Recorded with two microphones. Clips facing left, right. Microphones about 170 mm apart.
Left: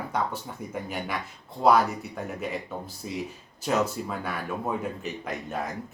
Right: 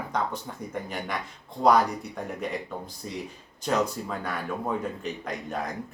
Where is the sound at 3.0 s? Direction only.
5° left (ahead or behind).